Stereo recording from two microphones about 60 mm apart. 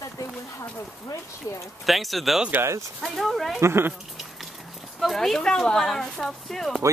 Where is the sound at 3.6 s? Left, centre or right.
Right.